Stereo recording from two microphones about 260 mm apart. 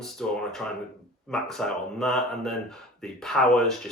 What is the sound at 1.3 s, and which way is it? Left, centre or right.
Speech, centre.